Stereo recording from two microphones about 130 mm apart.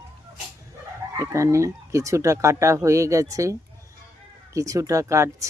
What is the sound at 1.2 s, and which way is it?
Speech, 20° right (ahead or behind).